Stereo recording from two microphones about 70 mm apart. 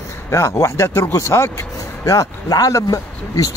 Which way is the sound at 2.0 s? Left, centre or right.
Left.